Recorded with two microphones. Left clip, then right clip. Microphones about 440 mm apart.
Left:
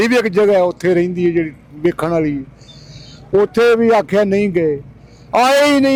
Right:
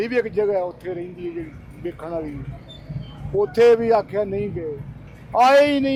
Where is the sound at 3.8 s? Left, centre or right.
Left.